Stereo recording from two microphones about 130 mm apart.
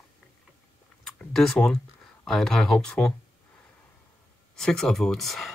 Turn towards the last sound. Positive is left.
turn(degrees=0)  # may be behind; listen again after turning